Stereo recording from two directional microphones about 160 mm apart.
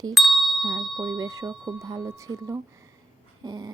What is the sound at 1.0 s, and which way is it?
A woman's voice, 25° right (ahead or behind).